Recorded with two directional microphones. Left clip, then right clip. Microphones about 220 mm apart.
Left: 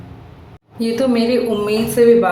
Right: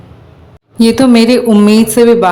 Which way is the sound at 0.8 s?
45° right (ahead or behind).